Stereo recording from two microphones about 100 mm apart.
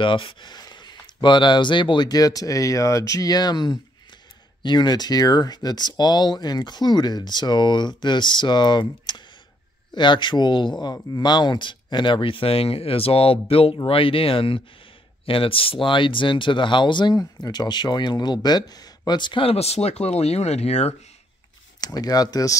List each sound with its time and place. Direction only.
0.0 s speech: 60° left (ahead or behind)
17.1 s speech: 40° left (ahead or behind)
19.4 s speech: 90° left
21.8 s speech: 40° left (ahead or behind)